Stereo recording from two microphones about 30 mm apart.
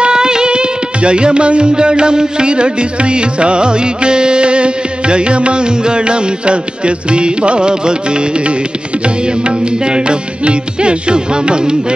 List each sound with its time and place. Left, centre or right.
0.0 s music: right